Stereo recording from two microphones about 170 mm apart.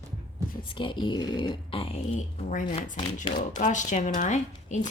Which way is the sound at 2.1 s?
50° left (ahead or behind).